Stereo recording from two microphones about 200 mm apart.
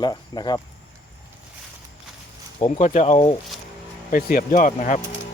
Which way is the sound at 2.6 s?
35° left (ahead or behind).